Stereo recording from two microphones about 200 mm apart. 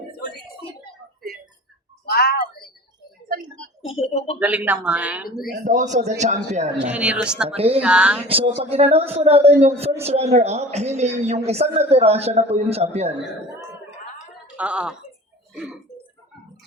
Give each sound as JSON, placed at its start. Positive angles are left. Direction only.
{"t": 2.0, "sound": "a sound", "side_deg": 50}
{"t": 3.9, "sound": "speech", "side_deg": 30}
{"t": 4.4, "sound": "speech", "side_deg": -10}
{"t": 5.5, "sound": "a woman's voice", "side_deg": -40}
{"t": 6.9, "sound": "speech", "side_deg": -5}
{"t": 7.4, "sound": "a woman's voice", "side_deg": -30}
{"t": 7.8, "sound": "speech", "side_deg": -5}
{"t": 8.3, "sound": "a woman's voice", "side_deg": -30}
{"t": 14.5, "sound": "speech", "side_deg": -5}